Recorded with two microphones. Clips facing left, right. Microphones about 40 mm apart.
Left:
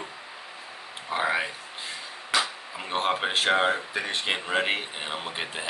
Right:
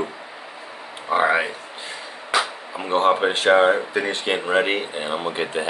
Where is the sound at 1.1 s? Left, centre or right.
Right.